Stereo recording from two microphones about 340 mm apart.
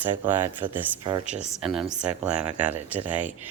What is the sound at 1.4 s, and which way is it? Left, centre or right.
Speech, centre.